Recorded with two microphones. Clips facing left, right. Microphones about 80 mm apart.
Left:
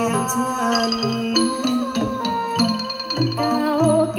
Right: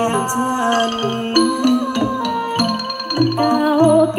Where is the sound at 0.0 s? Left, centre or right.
Right.